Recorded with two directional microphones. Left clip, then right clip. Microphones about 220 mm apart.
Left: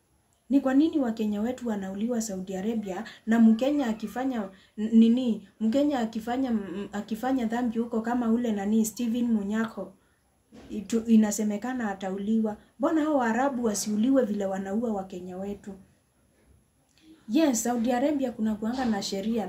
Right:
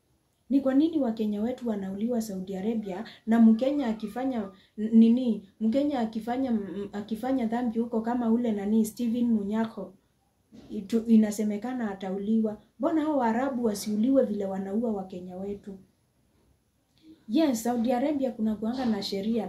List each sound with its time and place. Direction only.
0.5 s speech: 10° left (ahead or behind)
10.7 s speech: 10° left (ahead or behind)
17.3 s speech: 10° left (ahead or behind)